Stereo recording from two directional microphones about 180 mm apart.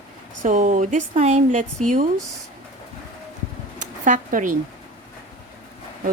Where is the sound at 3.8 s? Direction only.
45° right (ahead or behind).